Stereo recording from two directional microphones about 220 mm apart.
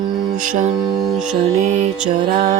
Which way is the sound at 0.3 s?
35° right (ahead or behind).